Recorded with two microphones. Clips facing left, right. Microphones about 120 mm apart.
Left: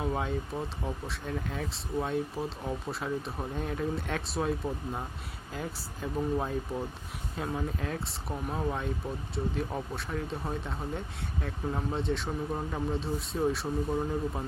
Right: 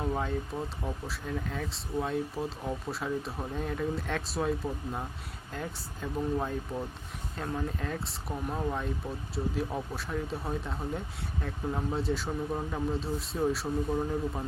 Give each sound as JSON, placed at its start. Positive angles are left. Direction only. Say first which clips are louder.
{"t": 0.0, "sound": "speech", "louder": "even", "side_deg": 0}